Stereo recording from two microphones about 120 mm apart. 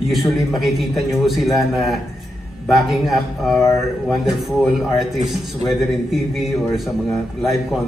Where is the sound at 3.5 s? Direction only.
25° left (ahead or behind).